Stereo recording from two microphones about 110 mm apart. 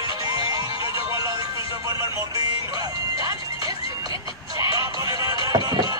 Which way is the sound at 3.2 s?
35° right (ahead or behind).